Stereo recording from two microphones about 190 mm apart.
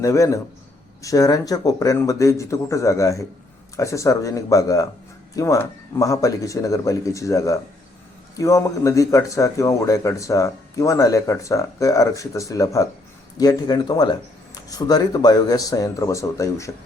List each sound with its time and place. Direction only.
0.0 s speech: 15° left (ahead or behind)